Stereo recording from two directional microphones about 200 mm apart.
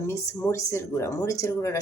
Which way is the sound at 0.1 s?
15° left (ahead or behind).